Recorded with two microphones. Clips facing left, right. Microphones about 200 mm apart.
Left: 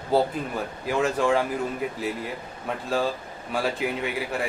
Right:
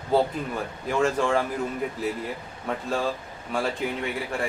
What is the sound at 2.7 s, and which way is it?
Speech, centre (ahead or behind).